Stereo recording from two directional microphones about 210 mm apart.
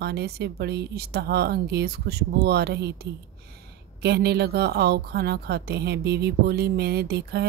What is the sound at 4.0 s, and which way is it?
A woman's voice, 50° right (ahead or behind).